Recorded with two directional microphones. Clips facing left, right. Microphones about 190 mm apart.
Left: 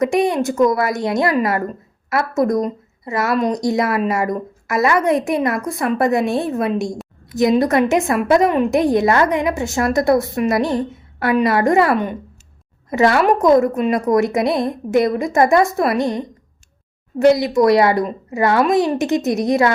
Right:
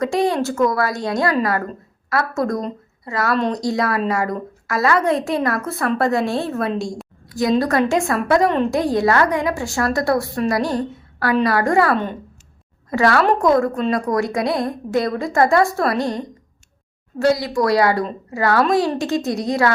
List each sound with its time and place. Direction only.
0.0 s a woman's voice: 20° left (ahead or behind)